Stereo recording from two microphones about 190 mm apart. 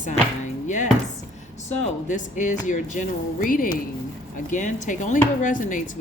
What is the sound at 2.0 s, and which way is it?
Speech, 40° left (ahead or behind).